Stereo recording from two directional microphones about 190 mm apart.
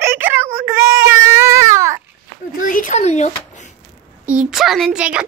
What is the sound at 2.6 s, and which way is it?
Speech, 45° left (ahead or behind).